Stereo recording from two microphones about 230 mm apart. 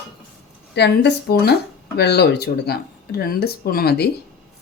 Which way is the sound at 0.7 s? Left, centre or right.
Left.